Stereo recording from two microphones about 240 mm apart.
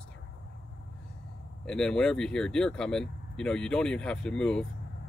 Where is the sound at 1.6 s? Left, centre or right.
Centre.